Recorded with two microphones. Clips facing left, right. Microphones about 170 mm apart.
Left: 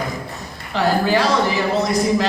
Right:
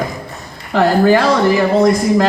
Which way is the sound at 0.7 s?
55° right (ahead or behind).